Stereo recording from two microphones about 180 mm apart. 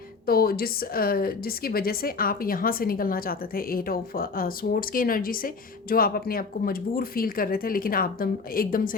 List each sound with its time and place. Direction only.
0.3 s speech: 55° left (ahead or behind)